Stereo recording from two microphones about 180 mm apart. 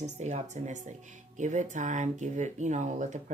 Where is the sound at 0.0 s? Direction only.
40° right (ahead or behind).